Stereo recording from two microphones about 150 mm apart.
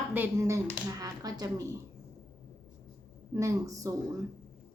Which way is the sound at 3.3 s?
20° right (ahead or behind).